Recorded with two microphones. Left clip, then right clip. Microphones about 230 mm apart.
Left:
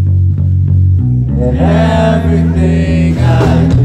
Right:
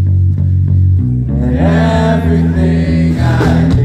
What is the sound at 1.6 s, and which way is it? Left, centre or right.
Mantra, left.